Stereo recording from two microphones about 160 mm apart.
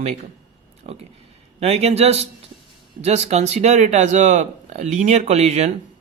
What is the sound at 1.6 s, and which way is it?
Speech, 40° right (ahead or behind).